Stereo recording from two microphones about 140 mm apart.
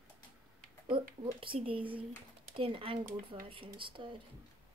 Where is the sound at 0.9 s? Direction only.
40° right (ahead or behind).